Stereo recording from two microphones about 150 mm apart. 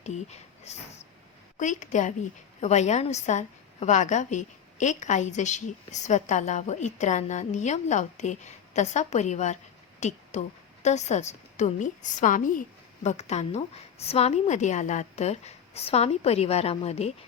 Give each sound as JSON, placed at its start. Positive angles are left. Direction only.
{"t": 0.0, "sound": "a woman's voice", "side_deg": 50}